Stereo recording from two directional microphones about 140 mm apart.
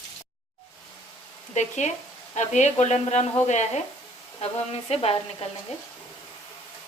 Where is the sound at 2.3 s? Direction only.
55° left (ahead or behind).